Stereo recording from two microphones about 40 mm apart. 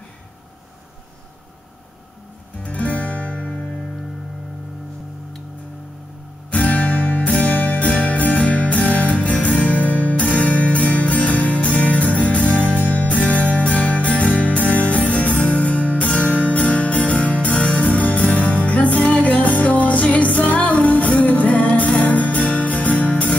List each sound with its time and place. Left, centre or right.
2.6 s music: left
6.5 s music: left